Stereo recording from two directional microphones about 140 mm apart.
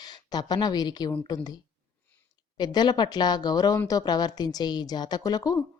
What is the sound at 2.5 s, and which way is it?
A woman's voice, 30° left (ahead or behind).